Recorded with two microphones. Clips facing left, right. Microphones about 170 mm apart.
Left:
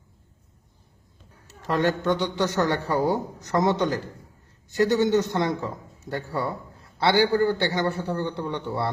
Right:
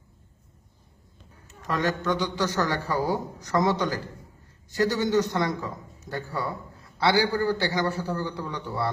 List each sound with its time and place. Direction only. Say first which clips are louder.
1.6 s a man's voice: left 3 dB; 25° left (ahead or behind)